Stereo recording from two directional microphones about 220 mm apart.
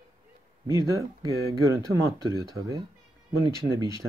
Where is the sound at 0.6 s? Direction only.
15° right (ahead or behind).